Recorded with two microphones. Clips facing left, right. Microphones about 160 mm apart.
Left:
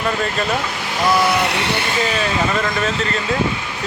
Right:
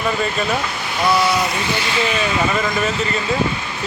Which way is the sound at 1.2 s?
60° left (ahead or behind).